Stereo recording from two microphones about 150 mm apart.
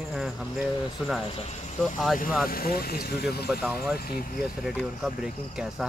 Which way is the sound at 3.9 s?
80° left.